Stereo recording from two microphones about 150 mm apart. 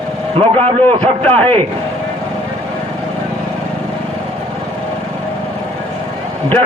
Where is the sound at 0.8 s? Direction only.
10° left (ahead or behind).